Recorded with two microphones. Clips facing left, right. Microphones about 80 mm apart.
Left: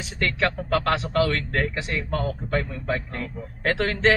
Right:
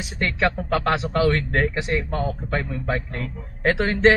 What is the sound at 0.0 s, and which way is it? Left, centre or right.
A man's voice, centre.